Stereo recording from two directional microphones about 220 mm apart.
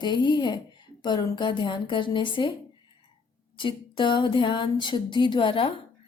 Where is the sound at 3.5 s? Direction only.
20° left (ahead or behind).